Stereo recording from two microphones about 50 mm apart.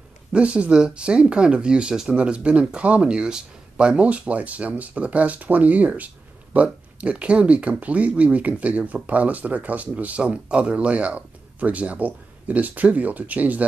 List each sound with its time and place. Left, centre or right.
0.3 s speech: right